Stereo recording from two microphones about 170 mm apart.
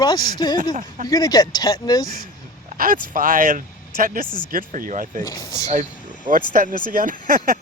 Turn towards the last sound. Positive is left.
turn(degrees=-55)  # may be behind; listen again after turning